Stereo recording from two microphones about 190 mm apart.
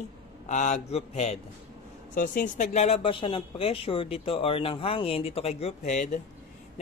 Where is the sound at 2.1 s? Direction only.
45° left (ahead or behind).